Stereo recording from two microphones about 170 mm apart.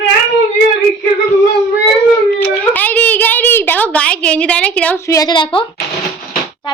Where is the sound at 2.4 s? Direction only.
10° left (ahead or behind); by 5.7 s 30° left (ahead or behind).